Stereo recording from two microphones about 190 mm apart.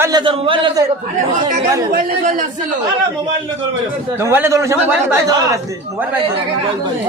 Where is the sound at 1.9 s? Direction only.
45° right (ahead or behind).